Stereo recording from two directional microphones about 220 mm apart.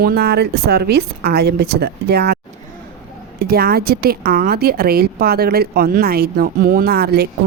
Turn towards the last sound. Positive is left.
turn(degrees=-45)  # may be behind; listen again after turning